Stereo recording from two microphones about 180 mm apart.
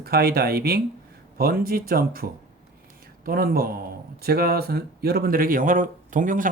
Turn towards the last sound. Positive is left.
turn(degrees=-45)  # may be behind; listen again after turning